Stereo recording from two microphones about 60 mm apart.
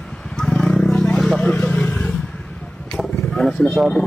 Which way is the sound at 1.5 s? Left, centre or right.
Centre.